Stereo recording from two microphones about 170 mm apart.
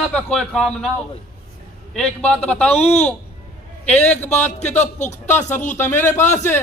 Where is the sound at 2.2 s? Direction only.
5° left (ahead or behind).